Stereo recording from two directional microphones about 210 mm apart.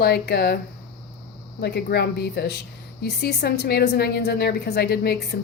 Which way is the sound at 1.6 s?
50° left (ahead or behind).